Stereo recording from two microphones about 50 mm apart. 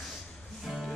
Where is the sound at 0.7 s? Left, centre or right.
Centre.